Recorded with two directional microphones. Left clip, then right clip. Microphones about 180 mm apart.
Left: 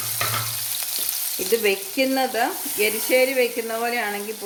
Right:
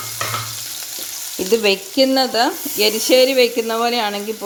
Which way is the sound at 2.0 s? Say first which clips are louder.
Right 6 dB; 30° right (ahead or behind).